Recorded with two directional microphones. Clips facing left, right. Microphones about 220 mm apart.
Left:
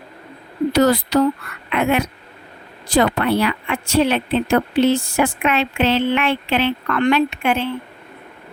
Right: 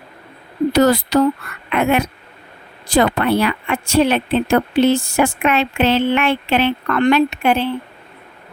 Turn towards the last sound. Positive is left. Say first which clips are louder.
# right 3 dB
turn(degrees=-35)  # may be behind; listen again after turning